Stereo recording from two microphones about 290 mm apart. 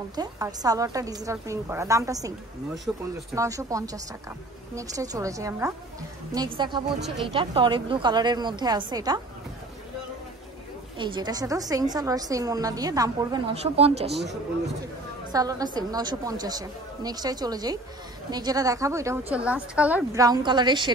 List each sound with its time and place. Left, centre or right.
0.1 s a woman's voice: centre
11.0 s a woman's voice: centre
15.3 s a woman's voice: centre